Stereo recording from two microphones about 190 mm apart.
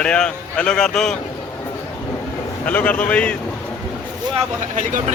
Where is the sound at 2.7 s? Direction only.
10° left (ahead or behind).